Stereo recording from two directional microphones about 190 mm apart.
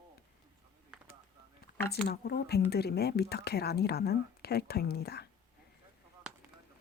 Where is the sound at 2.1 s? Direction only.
60° left (ahead or behind).